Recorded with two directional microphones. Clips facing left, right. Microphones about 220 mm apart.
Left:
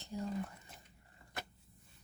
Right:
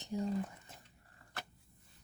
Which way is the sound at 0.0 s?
15° right (ahead or behind).